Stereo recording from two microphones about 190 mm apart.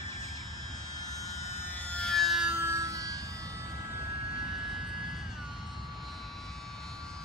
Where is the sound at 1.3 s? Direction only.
35° left (ahead or behind).